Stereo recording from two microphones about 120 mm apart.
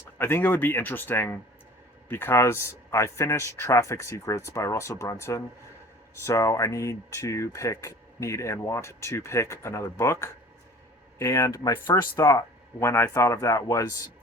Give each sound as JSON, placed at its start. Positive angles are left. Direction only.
{"t": 0.2, "sound": "speech", "side_deg": 20}